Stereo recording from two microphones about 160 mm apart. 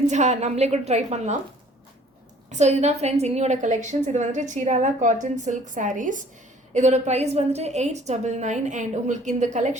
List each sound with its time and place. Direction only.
0.1 s a woman's voice: 45° right (ahead or behind)
2.5 s a woman's voice: 45° right (ahead or behind)